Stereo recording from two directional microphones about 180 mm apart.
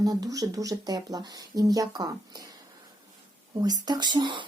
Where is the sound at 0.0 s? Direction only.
20° right (ahead or behind).